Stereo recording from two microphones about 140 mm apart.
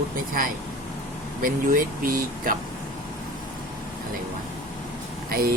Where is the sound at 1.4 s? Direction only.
90° right.